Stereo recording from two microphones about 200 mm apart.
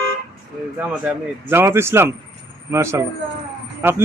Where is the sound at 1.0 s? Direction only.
10° right (ahead or behind).